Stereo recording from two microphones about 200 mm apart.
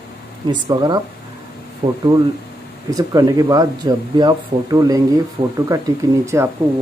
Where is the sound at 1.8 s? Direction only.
35° right (ahead or behind).